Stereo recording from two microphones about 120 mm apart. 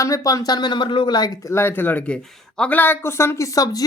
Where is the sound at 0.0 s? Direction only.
25° left (ahead or behind).